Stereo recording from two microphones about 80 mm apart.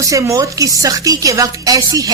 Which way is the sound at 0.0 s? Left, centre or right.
Right.